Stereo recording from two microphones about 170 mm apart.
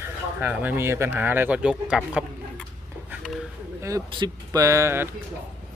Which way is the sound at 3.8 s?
20° right (ahead or behind).